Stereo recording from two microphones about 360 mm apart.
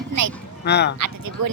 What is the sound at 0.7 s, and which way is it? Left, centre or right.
Speech, left.